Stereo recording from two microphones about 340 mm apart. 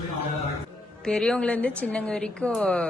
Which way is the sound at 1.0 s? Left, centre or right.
Centre.